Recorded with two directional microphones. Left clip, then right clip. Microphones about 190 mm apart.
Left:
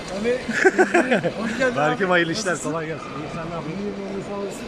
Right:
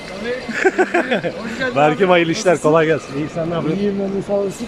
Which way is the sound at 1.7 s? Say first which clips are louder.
Right 9 dB; 15° right (ahead or behind).